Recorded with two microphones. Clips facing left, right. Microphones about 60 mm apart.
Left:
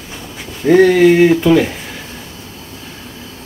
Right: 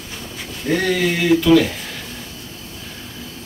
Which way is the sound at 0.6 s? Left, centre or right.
Left.